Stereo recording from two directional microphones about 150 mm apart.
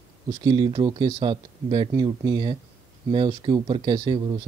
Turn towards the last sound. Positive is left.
turn(degrees=-30)  # may be behind; listen again after turning